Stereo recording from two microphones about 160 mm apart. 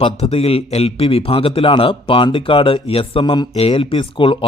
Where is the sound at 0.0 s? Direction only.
40° left (ahead or behind).